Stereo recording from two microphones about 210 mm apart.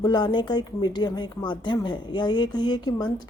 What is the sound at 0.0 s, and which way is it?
Speech, 20° left (ahead or behind).